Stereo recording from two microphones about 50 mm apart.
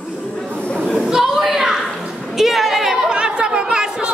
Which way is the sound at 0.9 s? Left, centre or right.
Centre.